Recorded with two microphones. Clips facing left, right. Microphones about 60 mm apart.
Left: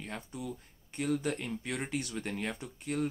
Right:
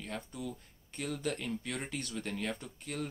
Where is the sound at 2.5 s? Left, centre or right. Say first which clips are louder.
Left 5 dB; centre.